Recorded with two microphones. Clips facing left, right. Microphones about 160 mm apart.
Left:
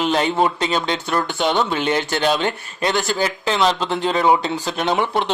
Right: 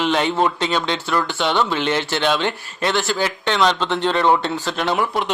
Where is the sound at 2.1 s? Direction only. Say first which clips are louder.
Left 1 dB; 40° left (ahead or behind).